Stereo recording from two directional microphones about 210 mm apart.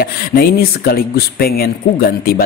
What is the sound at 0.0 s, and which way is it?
Speech, 45° left (ahead or behind).